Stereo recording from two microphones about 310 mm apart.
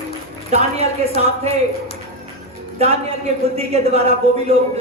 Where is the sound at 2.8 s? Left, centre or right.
Centre.